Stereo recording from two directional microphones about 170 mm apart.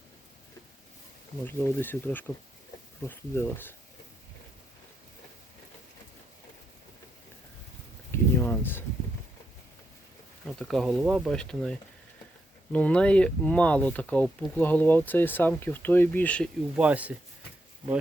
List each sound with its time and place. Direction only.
1.5 s speech: 10° left (ahead or behind)
8.1 s a sound: 15° left (ahead or behind)
10.4 s speech: centre (ahead or behind)
16.7 s speech: 10° right (ahead or behind)